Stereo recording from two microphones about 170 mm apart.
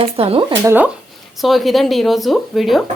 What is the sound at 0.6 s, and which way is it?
Speech, 10° right (ahead or behind).